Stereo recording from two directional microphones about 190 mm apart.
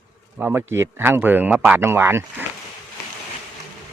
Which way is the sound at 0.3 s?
10° right (ahead or behind).